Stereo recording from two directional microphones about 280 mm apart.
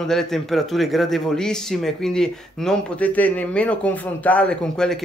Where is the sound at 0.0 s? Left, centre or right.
Centre.